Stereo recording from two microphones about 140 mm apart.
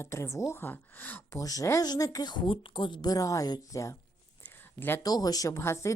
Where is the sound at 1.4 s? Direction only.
25° left (ahead or behind).